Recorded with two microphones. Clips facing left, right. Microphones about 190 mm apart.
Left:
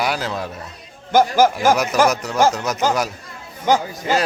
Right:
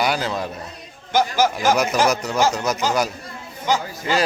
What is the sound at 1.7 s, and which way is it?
A man's voice, centre (ahead or behind).